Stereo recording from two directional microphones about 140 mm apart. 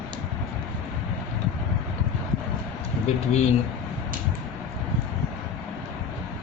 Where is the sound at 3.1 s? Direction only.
50° left (ahead or behind).